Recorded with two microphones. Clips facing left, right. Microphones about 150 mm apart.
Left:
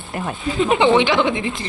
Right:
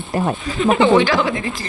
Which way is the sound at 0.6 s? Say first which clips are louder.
Right 1 dB; 20° left (ahead or behind).